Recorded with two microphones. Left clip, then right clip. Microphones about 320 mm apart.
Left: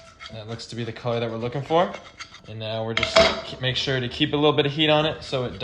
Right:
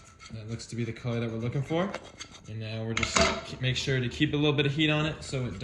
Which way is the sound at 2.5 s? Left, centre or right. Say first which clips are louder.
Left 8 dB; left.